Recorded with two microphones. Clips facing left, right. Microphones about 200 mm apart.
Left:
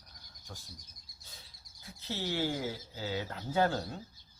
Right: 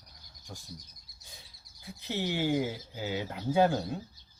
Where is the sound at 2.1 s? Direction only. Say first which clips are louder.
Right 4 dB; 15° right (ahead or behind).